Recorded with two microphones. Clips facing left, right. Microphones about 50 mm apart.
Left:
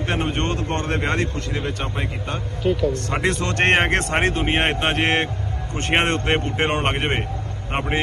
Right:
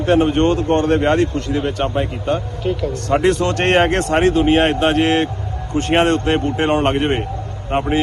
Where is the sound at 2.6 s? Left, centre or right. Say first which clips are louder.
Even; centre.